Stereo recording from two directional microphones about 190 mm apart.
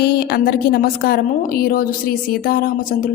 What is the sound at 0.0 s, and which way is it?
A woman's voice, 55° left (ahead or behind).